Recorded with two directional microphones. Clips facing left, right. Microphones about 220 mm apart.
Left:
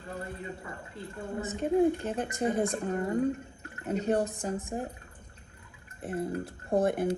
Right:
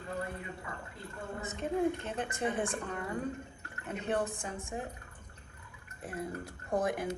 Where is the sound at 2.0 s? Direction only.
35° left (ahead or behind).